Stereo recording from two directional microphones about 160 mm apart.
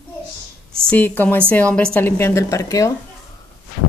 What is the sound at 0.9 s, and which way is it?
A woman's voice, 10° left (ahead or behind).